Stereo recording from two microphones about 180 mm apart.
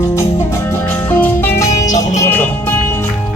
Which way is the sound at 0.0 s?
15° left (ahead or behind).